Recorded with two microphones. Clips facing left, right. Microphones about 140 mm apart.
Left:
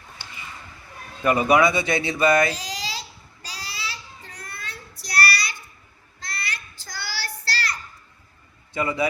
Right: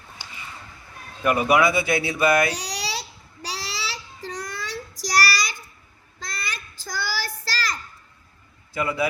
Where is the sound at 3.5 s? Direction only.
90° right.